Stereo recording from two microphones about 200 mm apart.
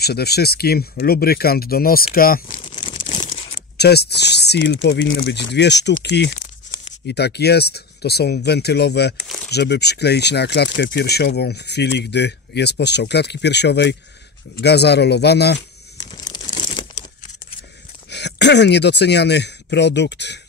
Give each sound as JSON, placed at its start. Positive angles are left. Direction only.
{"t": 0.0, "sound": "speech", "side_deg": 55}
{"t": 2.6, "sound": "crumpling", "side_deg": 25}
{"t": 3.7, "sound": "speech", "side_deg": 55}
{"t": 5.1, "sound": "speech", "side_deg": 55}
{"t": 9.2, "sound": "a sound", "side_deg": 0}
{"t": 9.5, "sound": "speech", "side_deg": 55}
{"t": 16.0, "sound": "crumpling", "side_deg": 20}
{"t": 18.1, "sound": "speech", "side_deg": 60}